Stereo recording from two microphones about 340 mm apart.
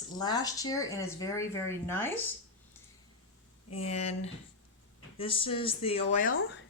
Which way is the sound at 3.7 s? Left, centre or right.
Centre.